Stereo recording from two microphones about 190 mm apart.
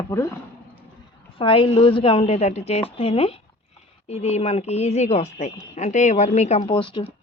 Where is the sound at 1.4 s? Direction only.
30° left (ahead or behind).